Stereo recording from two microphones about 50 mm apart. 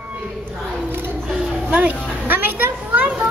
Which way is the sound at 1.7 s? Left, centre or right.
Right.